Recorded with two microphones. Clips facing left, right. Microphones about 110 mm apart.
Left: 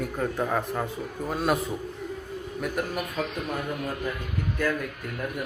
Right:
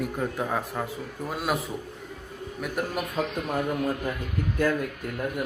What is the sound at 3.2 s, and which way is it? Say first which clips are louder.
Speech: right 3 dB; 20° right (ahead or behind).